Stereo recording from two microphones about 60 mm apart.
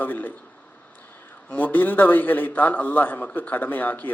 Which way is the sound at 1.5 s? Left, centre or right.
Left.